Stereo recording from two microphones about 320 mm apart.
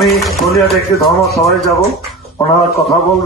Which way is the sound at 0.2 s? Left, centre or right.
Centre.